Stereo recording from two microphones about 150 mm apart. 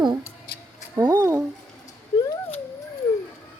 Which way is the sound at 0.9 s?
20° right (ahead or behind).